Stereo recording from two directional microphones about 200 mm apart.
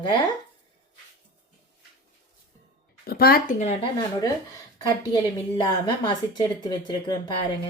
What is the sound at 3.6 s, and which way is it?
Speech, 35° left (ahead or behind).